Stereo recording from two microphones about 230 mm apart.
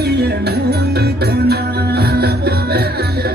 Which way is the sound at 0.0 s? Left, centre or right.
Right.